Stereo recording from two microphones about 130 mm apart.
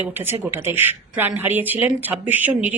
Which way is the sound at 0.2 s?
15° right (ahead or behind).